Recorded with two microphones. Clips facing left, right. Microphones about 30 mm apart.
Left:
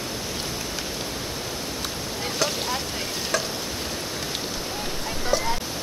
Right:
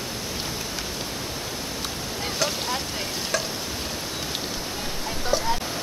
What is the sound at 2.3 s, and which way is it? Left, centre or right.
Boat, centre.